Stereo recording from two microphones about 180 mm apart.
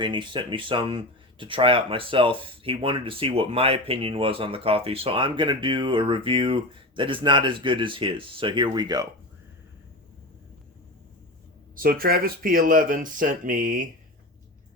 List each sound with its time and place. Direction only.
0.0 s speech: 25° right (ahead or behind)
11.8 s speech: 55° right (ahead or behind)